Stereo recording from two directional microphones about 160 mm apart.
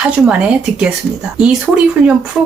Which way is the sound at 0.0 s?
5° right (ahead or behind).